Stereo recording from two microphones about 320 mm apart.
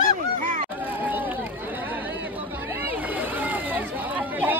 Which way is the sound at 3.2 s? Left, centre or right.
Centre.